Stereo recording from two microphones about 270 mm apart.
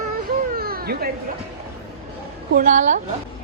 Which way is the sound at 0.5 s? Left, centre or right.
Right.